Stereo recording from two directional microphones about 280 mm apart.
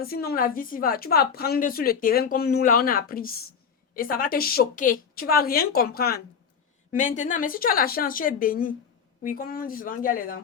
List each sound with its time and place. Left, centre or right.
0.0 s a woman's voice: left